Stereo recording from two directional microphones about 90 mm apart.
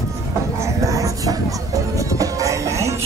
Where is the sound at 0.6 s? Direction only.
35° right (ahead or behind).